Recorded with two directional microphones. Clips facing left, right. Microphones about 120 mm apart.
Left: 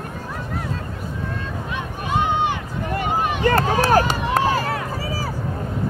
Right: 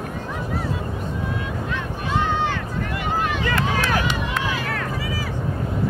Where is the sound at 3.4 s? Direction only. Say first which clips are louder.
Left 5 dB; 40° left (ahead or behind).